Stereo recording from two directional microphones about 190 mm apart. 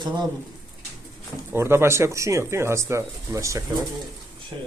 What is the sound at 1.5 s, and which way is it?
Speech, 15° right (ahead or behind).